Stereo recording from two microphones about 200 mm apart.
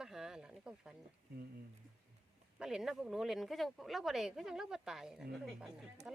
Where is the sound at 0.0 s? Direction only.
Centre (ahead or behind).